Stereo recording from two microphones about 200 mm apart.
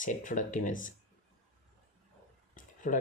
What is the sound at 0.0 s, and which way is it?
Speech, 40° left (ahead or behind).